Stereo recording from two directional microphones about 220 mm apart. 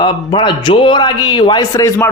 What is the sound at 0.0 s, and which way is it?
A man's voice, 20° left (ahead or behind).